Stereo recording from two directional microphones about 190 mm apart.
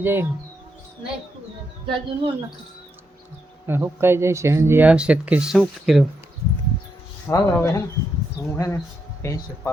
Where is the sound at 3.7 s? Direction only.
10° right (ahead or behind).